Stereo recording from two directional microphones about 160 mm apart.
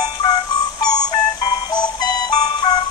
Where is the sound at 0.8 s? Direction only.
25° left (ahead or behind).